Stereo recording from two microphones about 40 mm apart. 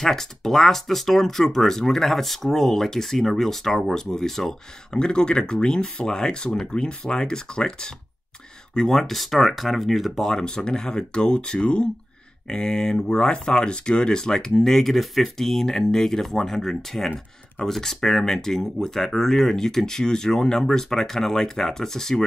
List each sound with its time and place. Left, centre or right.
0.0 s speech: centre
4.9 s speech: left
8.7 s speech: centre
10.4 s speech: left